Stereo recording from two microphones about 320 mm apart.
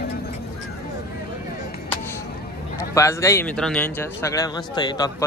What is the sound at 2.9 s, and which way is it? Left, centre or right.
Speech, centre.